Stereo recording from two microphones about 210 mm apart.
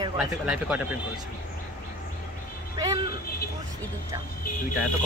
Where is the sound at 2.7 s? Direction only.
15° right (ahead or behind).